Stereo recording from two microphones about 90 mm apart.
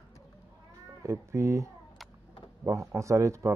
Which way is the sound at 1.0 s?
35° right (ahead or behind).